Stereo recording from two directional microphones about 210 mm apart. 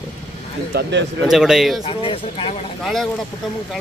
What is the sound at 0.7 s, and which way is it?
Speech, 50° right (ahead or behind).